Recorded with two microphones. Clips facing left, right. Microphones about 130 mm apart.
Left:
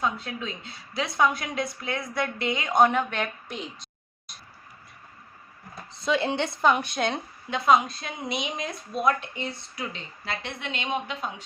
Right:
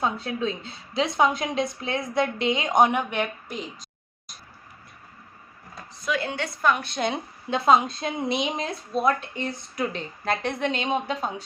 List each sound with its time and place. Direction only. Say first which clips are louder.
0.0 s a woman's voice: right 3 dB; 35° right (ahead or behind); by 3.2 s 15° right (ahead or behind)
3.5 s a woman's voice: right 2 dB; centre (ahead or behind)
5.9 s a woman's voice: left 3 dB; 25° left (ahead or behind)
7.5 s speech: right 2 dB; 30° right (ahead or behind)